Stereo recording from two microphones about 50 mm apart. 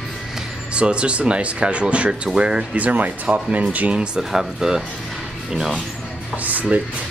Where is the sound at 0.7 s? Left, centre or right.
Right.